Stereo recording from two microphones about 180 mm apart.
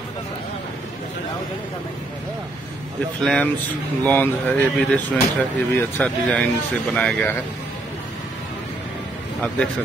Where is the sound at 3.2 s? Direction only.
5° left (ahead or behind).